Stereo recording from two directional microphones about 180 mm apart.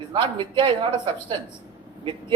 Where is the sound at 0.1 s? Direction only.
25° right (ahead or behind).